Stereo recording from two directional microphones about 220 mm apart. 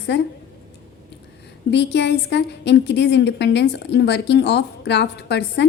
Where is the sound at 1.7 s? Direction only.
50° left (ahead or behind).